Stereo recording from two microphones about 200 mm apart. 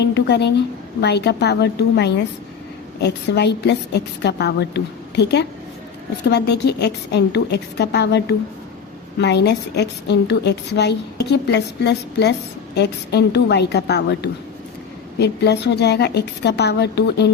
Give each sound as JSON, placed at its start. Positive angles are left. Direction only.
{"t": 0.0, "sound": "a woman's voice", "side_deg": 55}